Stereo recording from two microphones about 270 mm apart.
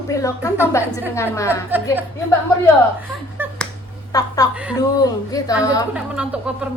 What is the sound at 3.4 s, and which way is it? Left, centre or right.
Finger snapping, centre.